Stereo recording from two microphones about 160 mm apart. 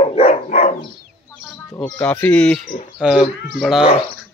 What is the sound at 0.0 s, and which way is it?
Dog, 40° left (ahead or behind).